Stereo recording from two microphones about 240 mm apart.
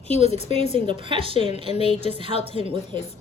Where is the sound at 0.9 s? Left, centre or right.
Right.